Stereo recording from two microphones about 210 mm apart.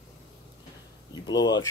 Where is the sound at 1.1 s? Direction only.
20° left (ahead or behind).